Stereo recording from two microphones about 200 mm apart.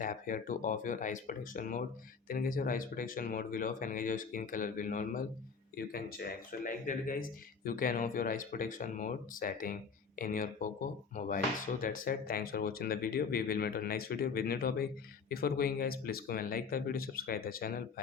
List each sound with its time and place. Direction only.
0.0 s speech: 45° left (ahead or behind)